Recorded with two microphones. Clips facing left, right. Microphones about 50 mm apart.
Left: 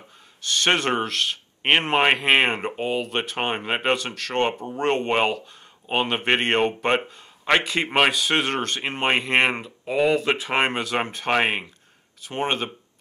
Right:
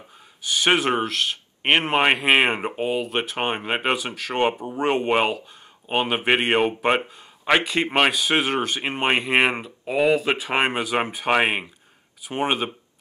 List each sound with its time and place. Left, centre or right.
0.4 s a man's voice: centre